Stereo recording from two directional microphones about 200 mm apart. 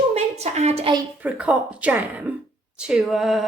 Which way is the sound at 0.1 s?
30° right (ahead or behind).